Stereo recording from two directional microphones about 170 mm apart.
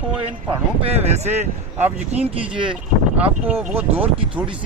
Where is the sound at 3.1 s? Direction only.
10° right (ahead or behind).